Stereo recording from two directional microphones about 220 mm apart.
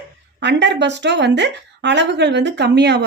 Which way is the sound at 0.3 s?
50° right (ahead or behind).